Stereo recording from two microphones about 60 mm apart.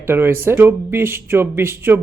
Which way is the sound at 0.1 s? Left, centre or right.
Right.